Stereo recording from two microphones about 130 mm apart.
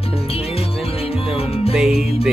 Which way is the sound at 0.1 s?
50° left (ahead or behind).